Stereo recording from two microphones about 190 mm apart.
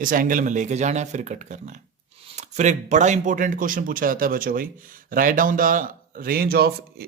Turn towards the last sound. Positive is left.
turn(degrees=-55)  # may be behind; listen again after turning